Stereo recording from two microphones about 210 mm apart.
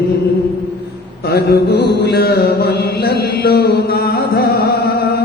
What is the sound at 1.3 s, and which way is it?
Mantra, 50° left (ahead or behind).